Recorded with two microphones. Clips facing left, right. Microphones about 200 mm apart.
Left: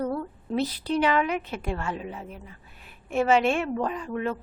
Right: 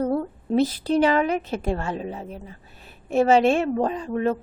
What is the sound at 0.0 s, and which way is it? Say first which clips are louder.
A woman's voice: right 5 dB; 40° right (ahead or behind).